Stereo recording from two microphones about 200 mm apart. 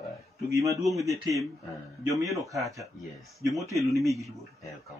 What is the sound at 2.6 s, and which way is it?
Speech, 15° right (ahead or behind).